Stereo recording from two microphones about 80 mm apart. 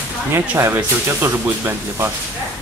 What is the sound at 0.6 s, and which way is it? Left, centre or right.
Speech, right.